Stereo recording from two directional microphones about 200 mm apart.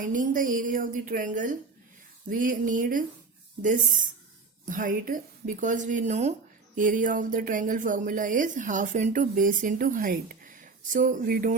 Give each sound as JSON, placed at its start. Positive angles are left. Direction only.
{"t": 0.0, "sound": "speech", "side_deg": -40}